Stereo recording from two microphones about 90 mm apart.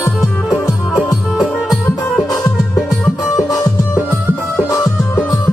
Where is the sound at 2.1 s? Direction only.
5° left (ahead or behind).